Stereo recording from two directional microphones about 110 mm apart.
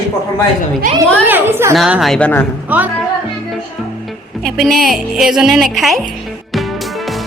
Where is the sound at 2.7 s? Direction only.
15° right (ahead or behind).